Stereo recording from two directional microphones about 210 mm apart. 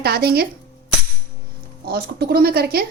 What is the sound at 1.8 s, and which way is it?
Speech, 50° right (ahead or behind).